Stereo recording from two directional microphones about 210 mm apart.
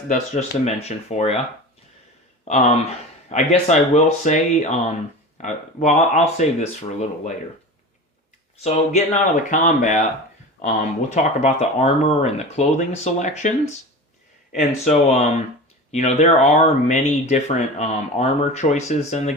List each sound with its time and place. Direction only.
0.1 s speech: 35° left (ahead or behind)
2.4 s speech: 30° left (ahead or behind)
8.5 s speech: 30° left (ahead or behind)
11.1 s speech: 30° left (ahead or behind)